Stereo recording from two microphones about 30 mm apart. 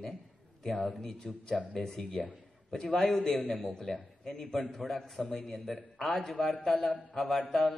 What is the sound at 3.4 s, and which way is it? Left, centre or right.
Speech, left.